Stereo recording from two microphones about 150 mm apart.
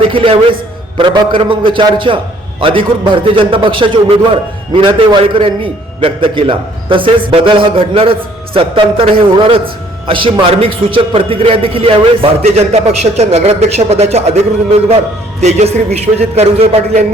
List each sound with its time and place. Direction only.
0.1 s a man's voice: 35° right (ahead or behind)